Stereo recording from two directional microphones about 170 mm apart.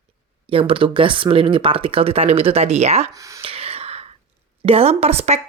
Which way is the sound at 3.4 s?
35° right (ahead or behind).